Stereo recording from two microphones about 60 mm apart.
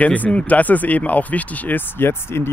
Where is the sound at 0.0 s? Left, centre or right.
Left.